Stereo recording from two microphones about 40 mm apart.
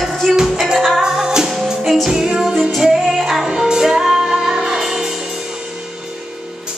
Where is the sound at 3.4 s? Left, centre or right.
Centre.